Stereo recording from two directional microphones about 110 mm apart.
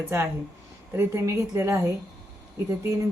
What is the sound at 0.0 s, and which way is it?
Speech, 25° right (ahead or behind).